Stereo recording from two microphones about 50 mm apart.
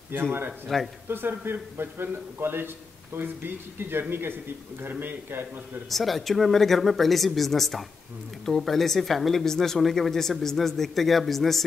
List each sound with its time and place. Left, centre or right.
0.1 s a man's voice: right
0.7 s speech: centre
1.0 s a man's voice: right
5.9 s speech: centre